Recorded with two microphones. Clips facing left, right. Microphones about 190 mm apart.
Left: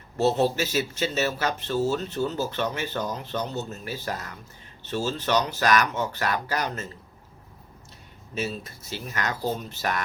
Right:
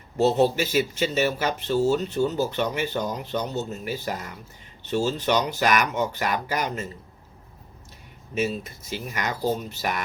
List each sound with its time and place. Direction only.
0.2 s speech: 15° right (ahead or behind)
8.4 s speech: 15° right (ahead or behind)